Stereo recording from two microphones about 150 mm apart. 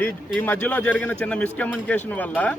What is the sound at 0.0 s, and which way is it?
A man's voice, 10° left (ahead or behind).